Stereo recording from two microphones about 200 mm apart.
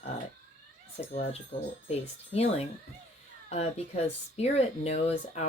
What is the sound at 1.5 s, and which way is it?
Speech, 30° left (ahead or behind).